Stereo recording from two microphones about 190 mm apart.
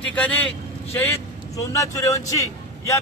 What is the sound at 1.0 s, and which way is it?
A man's voice, 15° left (ahead or behind).